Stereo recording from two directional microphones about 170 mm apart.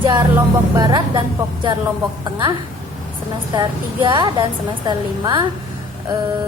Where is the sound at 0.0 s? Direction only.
25° right (ahead or behind).